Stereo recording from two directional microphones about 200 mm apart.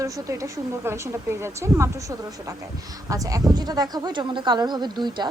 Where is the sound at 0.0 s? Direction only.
15° right (ahead or behind).